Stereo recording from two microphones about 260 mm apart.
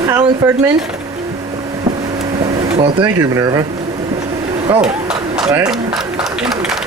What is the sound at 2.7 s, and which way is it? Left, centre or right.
Speech, centre.